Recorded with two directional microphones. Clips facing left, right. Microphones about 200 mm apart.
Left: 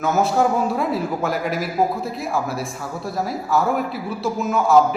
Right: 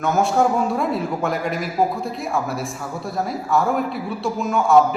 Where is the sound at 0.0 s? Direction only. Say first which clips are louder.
Even; centre (ahead or behind).